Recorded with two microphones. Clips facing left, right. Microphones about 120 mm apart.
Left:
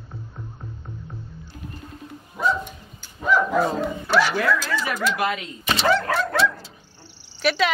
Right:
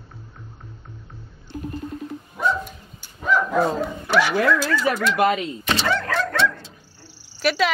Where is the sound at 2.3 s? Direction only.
Centre (ahead or behind).